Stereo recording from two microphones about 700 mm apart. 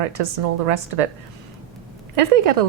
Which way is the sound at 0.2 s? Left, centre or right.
Right.